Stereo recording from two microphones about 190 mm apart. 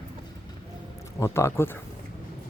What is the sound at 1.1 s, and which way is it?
Speech, 15° left (ahead or behind).